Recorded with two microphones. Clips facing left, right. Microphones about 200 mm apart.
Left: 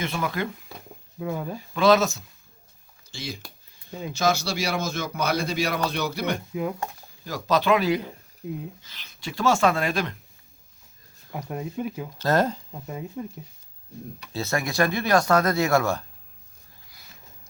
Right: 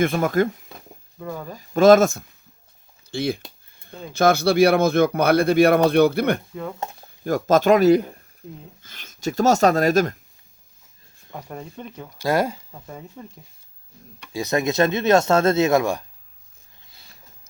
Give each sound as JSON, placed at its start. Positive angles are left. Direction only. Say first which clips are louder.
{"t": 0.0, "sound": "speech", "louder": "right 9 dB", "side_deg": -50}
{"t": 1.2, "sound": "speech", "louder": "left 2 dB", "side_deg": 10}
{"t": 1.5, "sound": "speech", "louder": "right 7 dB", "side_deg": -45}
{"t": 6.5, "sound": "speech", "louder": "left 3 dB", "side_deg": 10}
{"t": 7.3, "sound": "speech", "louder": "right 6 dB", "side_deg": -50}
{"t": 11.3, "sound": "speech", "louder": "left 3 dB", "side_deg": 10}
{"t": 12.2, "sound": "speech", "louder": "right 1 dB", "side_deg": -10}
{"t": 12.7, "sound": "speech", "louder": "left 4 dB", "side_deg": 5}
{"t": 14.3, "sound": "speech", "louder": "right 5 dB", "side_deg": -20}